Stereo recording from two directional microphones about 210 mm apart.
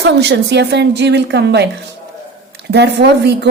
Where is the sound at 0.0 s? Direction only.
55° right (ahead or behind).